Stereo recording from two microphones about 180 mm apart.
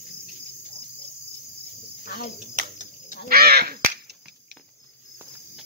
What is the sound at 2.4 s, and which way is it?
Cricket, 45° right (ahead or behind).